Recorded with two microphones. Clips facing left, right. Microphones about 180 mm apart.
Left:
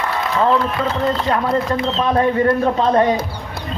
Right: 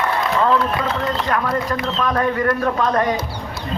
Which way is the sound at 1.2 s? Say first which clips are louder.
Left 3 dB; 25° left (ahead or behind).